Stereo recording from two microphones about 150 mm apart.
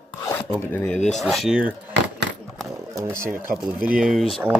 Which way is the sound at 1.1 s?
Centre (ahead or behind).